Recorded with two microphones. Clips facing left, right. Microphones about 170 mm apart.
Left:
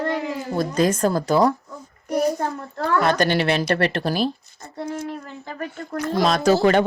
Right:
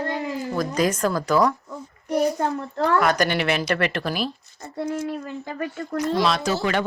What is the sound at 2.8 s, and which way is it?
A woman's voice, 30° left (ahead or behind).